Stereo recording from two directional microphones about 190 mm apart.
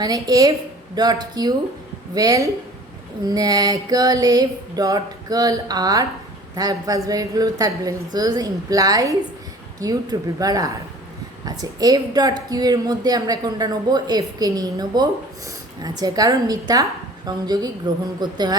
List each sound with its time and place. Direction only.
0.0 s a woman's voice: 20° right (ahead or behind)